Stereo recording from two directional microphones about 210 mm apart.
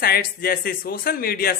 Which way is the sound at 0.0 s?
45° left (ahead or behind).